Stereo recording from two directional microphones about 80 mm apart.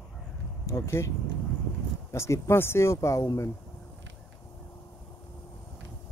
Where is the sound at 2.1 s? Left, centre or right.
Left.